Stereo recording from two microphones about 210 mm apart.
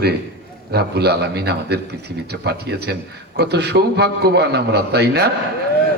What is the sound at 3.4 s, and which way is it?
A man's voice, 50° right (ahead or behind).